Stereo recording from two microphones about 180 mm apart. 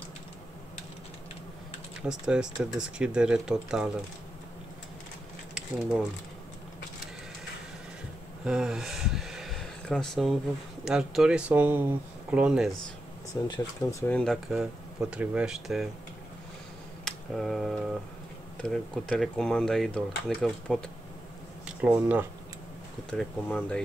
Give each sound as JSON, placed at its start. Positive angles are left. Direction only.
{"t": 2.0, "sound": "speech", "side_deg": -5}
{"t": 5.5, "sound": "speech", "side_deg": 0}
{"t": 8.5, "sound": "speech", "side_deg": -5}
{"t": 13.5, "sound": "speech", "side_deg": 20}
{"t": 14.1, "sound": "speech", "side_deg": 5}
{"t": 17.0, "sound": "speech", "side_deg": 0}
{"t": 21.6, "sound": "speech", "side_deg": -10}
{"t": 23.0, "sound": "speech", "side_deg": 5}